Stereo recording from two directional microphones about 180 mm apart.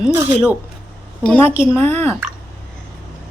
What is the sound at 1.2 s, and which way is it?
Speech, 5° left (ahead or behind).